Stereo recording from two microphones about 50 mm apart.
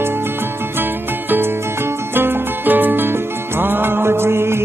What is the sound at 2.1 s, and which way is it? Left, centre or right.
Music, right.